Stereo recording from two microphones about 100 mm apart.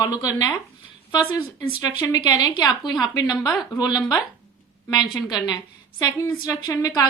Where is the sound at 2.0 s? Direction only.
40° left (ahead or behind).